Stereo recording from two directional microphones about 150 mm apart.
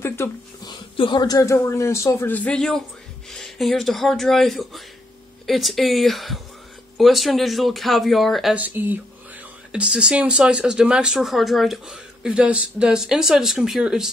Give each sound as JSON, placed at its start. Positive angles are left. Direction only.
{"t": 0.0, "sound": "speech", "side_deg": 15}
{"t": 0.7, "sound": "speech", "side_deg": 30}